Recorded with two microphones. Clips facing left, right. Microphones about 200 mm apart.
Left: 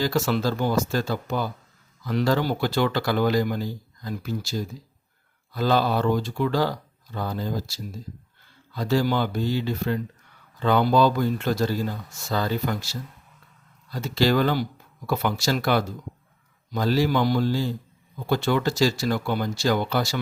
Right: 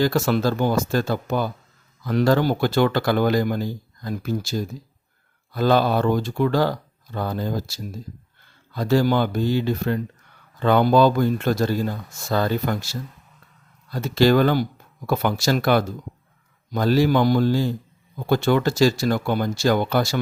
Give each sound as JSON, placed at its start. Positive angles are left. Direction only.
{"t": 0.0, "sound": "speech", "side_deg": -55}
{"t": 8.7, "sound": "speech", "side_deg": -50}